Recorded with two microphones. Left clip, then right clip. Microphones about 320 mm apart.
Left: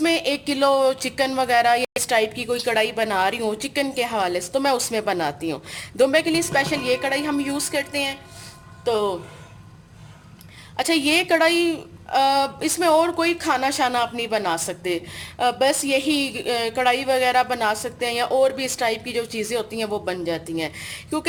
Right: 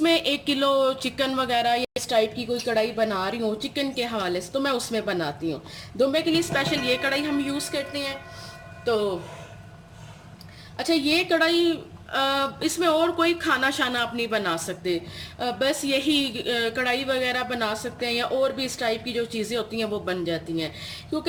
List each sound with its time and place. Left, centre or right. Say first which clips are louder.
0.0 s speech: left 1 dB; centre
10.8 s speech: left 3 dB; left